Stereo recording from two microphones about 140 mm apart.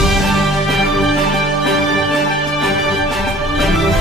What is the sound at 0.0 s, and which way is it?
Music, centre (ahead or behind).